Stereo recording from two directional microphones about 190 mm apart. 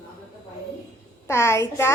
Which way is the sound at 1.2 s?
15° left (ahead or behind).